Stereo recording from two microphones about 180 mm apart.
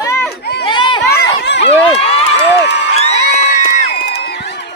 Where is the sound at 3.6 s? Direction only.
55° left (ahead or behind); by 4.7 s 70° left (ahead or behind).